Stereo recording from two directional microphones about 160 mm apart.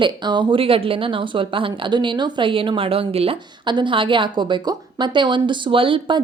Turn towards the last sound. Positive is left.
turn(degrees=-35)  # may be behind; listen again after turning